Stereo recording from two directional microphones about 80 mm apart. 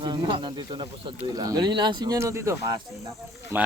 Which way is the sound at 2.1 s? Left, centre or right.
Right.